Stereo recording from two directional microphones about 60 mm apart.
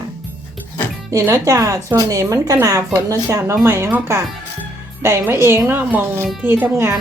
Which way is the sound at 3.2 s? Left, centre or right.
Right.